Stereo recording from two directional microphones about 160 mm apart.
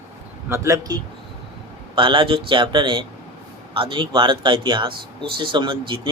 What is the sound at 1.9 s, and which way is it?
Speech, 30° right (ahead or behind).